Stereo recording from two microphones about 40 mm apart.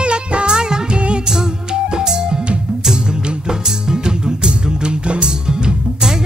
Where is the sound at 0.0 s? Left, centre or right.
Right.